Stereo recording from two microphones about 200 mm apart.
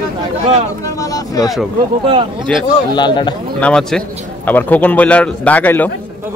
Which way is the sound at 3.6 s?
5° left (ahead or behind).